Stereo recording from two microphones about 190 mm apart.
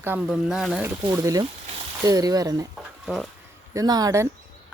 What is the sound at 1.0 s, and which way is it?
Speech, 15° right (ahead or behind).